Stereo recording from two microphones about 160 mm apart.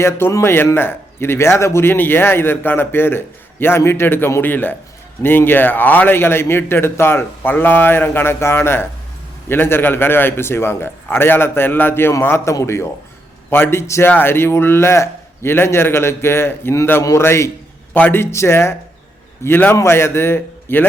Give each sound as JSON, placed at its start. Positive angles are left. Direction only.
{"t": 0.0, "sound": "speech", "side_deg": 15}